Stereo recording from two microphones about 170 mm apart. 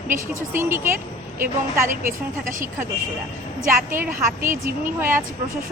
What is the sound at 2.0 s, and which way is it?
Speech, 50° right (ahead or behind).